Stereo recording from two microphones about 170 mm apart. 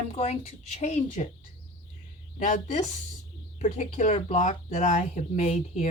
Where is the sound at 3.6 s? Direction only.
45° left (ahead or behind).